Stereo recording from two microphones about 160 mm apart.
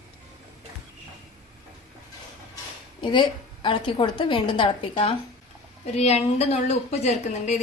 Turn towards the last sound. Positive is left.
turn(degrees=45)  # may be behind; listen again after turning